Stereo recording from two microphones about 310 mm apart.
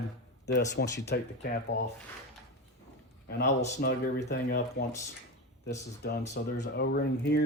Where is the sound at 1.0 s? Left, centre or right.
Left.